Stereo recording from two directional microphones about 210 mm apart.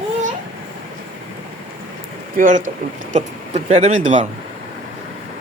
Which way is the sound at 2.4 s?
40° right (ahead or behind).